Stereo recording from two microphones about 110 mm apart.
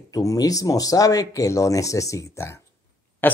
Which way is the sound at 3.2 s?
20° left (ahead or behind).